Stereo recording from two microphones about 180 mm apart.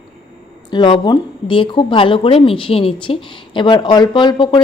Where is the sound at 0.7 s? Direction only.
25° left (ahead or behind).